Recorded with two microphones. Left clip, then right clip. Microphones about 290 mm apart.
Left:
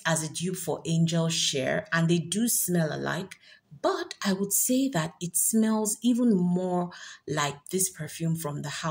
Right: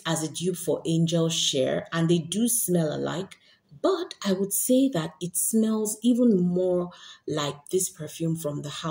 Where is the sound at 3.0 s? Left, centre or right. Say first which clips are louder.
Right 1 dB; left.